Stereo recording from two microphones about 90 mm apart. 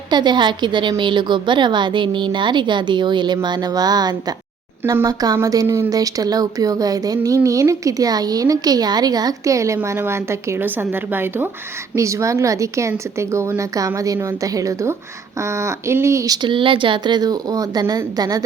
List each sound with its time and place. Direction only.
0.1 s a woman's voice: 55° right (ahead or behind)
5.6 s a woman's voice: 30° right (ahead or behind)
5.9 s a woman's voice: 40° right (ahead or behind); by 11.4 s 25° right (ahead or behind)
11.9 s speech: 35° right (ahead or behind)
16.4 s speech: 70° right (ahead or behind); by 18.4 s 45° right (ahead or behind)